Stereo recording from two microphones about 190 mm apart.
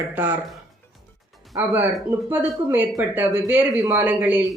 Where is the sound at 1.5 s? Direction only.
10° right (ahead or behind).